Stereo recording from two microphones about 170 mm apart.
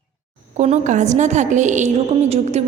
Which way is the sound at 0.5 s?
40° right (ahead or behind).